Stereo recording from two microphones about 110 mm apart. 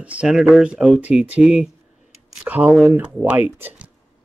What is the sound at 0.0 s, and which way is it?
Speech, 10° right (ahead or behind).